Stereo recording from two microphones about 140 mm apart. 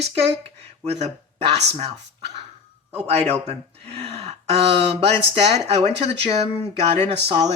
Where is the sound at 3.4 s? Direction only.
45° right (ahead or behind).